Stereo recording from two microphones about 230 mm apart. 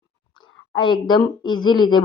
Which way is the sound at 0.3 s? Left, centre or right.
Left.